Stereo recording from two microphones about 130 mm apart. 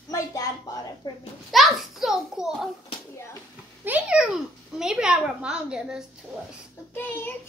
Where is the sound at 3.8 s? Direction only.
10° right (ahead or behind).